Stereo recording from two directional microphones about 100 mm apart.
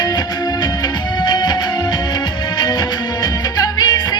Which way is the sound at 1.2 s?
45° left (ahead or behind).